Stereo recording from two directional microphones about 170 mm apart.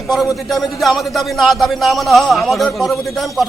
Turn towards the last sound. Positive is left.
turn(degrees=0)  # may be behind; listen again after turning